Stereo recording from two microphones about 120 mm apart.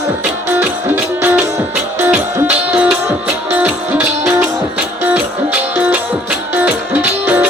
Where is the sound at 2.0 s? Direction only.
15° right (ahead or behind).